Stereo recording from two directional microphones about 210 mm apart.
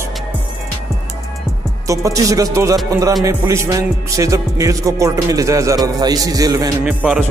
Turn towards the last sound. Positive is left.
turn(degrees=-5)  # may be behind; listen again after turning